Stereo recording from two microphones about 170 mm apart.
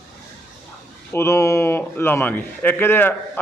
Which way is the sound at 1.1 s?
15° left (ahead or behind).